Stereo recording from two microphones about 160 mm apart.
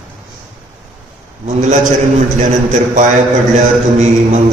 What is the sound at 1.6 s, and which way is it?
Speech, 50° right (ahead or behind).